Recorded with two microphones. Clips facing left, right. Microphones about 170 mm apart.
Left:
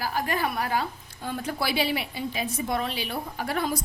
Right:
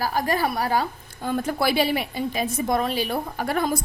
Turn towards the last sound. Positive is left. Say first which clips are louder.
# right 4 dB
turn(degrees=-50)  # may be behind; listen again after turning